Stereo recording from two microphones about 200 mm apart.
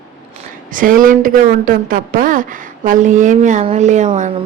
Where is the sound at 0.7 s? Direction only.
40° right (ahead or behind).